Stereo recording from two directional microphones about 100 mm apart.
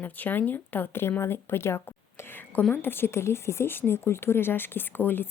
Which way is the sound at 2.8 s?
20° left (ahead or behind).